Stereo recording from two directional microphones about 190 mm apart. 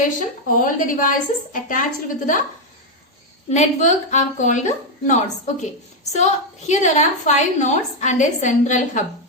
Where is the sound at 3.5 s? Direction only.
40° left (ahead or behind).